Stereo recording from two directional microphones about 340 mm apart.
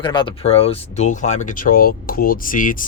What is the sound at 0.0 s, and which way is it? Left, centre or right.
Speech, centre.